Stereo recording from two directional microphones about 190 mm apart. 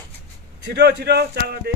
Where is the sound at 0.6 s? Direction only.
60° right (ahead or behind).